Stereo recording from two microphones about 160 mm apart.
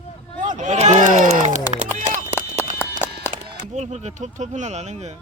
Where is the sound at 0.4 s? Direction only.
50° right (ahead or behind).